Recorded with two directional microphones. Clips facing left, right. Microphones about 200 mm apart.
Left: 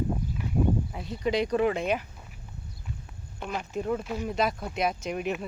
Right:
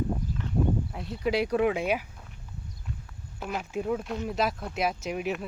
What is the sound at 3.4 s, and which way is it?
Speech, 5° right (ahead or behind).